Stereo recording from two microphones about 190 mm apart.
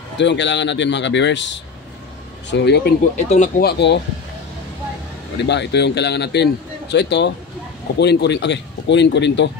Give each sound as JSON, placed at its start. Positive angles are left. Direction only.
{"t": 0.2, "sound": "a man's voice", "side_deg": 70}
{"t": 3.0, "sound": "speech", "side_deg": 40}
{"t": 3.6, "sound": "a man's voice", "side_deg": 65}
{"t": 5.4, "sound": "a man's voice", "side_deg": 65}